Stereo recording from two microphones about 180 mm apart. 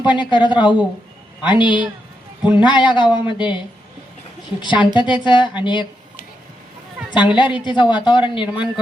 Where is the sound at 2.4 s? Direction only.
5° right (ahead or behind).